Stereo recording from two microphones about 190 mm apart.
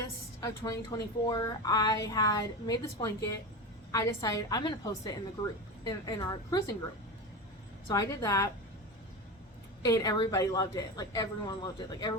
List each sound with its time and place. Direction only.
0.6 s a woman's voice: 15° left (ahead or behind)
7.9 s speech: 15° left (ahead or behind)
9.8 s a woman's voice: 20° left (ahead or behind)